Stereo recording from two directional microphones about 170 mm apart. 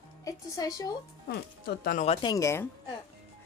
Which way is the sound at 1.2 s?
65° left (ahead or behind).